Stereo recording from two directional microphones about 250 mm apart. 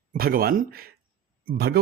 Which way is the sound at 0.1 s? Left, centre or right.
Right.